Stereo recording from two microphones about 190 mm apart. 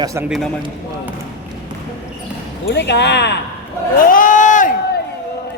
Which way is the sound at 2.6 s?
60° left (ahead or behind).